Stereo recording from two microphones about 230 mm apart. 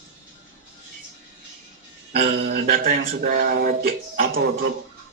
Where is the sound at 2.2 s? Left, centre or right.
Right.